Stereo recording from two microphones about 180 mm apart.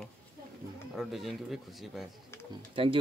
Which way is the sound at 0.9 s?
Centre (ahead or behind).